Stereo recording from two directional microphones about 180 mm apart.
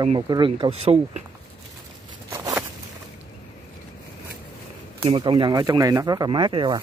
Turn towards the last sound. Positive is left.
turn(degrees=-25)  # may be behind; listen again after turning